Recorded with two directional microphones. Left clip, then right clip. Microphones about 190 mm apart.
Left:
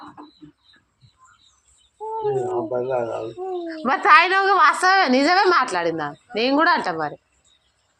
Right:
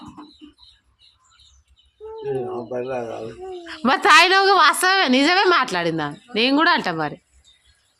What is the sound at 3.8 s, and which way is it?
A woman's voice, 70° right (ahead or behind).